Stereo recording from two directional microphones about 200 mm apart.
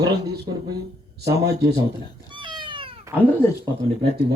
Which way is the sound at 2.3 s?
25° right (ahead or behind).